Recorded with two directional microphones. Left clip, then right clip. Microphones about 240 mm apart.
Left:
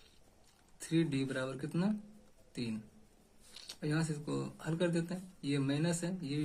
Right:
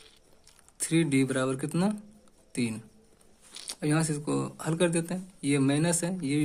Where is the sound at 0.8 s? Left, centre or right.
Right.